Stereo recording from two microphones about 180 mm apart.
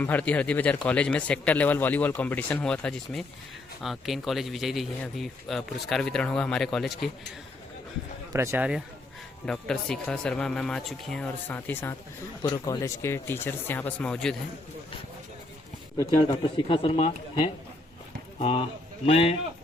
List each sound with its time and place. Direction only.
0.0 s speech: 10° left (ahead or behind)
8.3 s speech: 15° right (ahead or behind)
9.5 s speech: 5° left (ahead or behind)
16.0 s speech: 25° left (ahead or behind)